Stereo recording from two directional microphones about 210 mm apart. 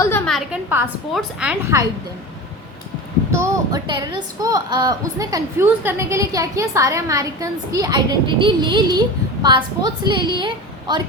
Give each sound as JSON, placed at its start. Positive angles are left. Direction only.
{"t": 0.3, "sound": "a woman's voice", "side_deg": 0}
{"t": 3.3, "sound": "a woman's voice", "side_deg": -15}